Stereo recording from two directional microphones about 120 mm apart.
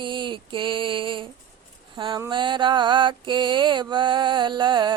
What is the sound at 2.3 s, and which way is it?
Mantra, 40° right (ahead or behind).